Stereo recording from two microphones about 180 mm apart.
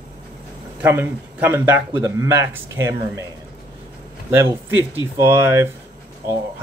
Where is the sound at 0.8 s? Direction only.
10° right (ahead or behind).